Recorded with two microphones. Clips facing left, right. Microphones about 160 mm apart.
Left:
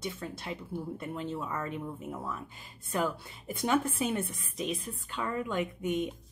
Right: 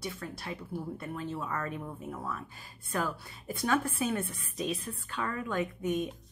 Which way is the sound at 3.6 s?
20° left (ahead or behind).